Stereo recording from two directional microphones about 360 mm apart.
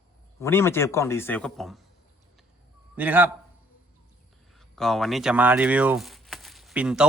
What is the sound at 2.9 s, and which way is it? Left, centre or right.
Speech, centre.